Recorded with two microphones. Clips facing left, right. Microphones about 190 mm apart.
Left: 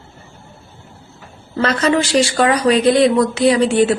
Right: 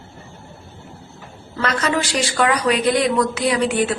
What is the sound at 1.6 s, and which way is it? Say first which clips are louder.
Speech: left 5 dB; 30° left (ahead or behind).